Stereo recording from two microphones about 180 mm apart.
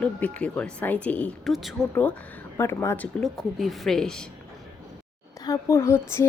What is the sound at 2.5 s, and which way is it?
Speech, 15° left (ahead or behind).